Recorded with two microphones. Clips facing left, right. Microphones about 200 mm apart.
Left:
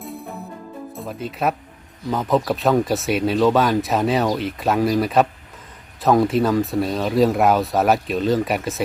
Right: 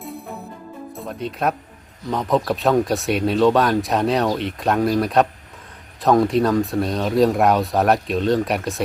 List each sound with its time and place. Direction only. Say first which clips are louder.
0.0 s music: even; centre (ahead or behind)
0.9 s speech: right 1 dB; centre (ahead or behind)